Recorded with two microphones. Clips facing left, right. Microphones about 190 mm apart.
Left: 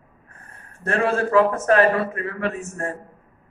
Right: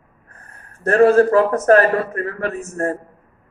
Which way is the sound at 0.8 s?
40° right (ahead or behind).